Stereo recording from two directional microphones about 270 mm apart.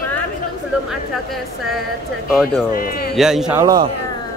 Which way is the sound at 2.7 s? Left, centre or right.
Left.